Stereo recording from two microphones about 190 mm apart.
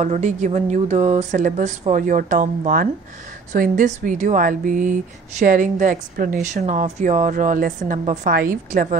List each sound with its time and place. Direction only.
0.0 s speech: 40° right (ahead or behind)